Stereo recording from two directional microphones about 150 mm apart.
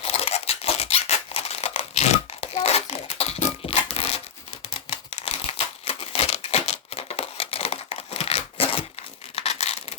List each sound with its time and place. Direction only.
0.0 s tearing: 45° left (ahead or behind)
4.9 s crumpling: 40° left (ahead or behind)
9.3 s a sound: 45° left (ahead or behind)